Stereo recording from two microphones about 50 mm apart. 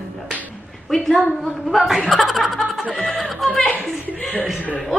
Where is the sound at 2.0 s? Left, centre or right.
Centre.